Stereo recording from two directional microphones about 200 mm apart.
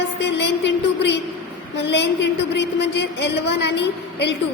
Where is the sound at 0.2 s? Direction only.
60° left (ahead or behind).